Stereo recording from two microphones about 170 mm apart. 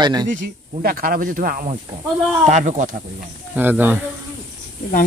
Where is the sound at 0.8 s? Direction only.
60° right (ahead or behind).